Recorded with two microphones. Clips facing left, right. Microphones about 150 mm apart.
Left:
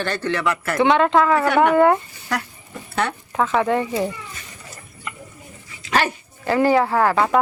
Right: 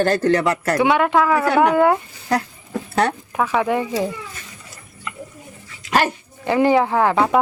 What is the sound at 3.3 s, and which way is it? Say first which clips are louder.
Speech: left 1 dB; 10° right (ahead or behind).